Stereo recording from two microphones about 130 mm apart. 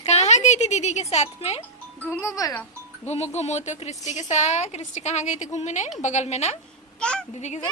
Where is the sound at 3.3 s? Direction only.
60° left (ahead or behind).